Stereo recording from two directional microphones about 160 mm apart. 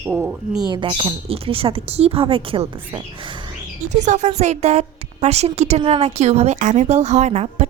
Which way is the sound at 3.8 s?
50° right (ahead or behind).